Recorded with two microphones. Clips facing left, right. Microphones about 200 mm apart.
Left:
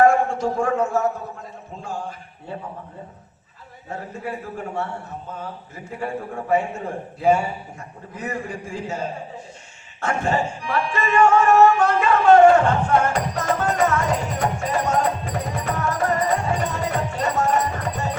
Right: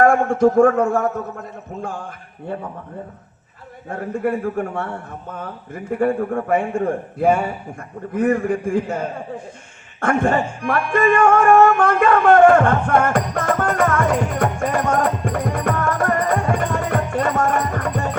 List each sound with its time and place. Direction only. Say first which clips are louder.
0.0 s a man's voice: right 3 dB; 55° right (ahead or behind)
3.8 s a man's voice: right 8 dB; 55° right (ahead or behind)